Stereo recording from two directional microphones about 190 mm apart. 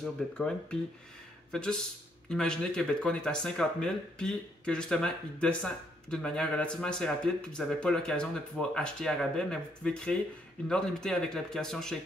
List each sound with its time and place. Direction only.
0.0 s speech: 5° left (ahead or behind)